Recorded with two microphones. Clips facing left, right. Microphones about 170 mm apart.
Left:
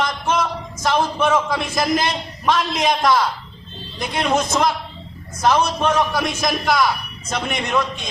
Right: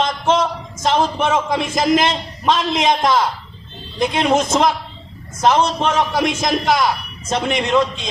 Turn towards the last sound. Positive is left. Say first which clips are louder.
# right 5 dB
turn(degrees=-20)  # may be behind; listen again after turning